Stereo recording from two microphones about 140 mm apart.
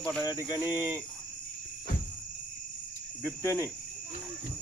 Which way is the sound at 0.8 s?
20° right (ahead or behind).